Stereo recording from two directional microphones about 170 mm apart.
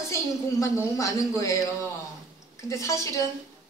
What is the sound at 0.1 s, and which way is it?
A woman's voice, 15° left (ahead or behind).